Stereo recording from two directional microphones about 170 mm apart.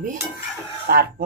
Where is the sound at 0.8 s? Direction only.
65° right (ahead or behind).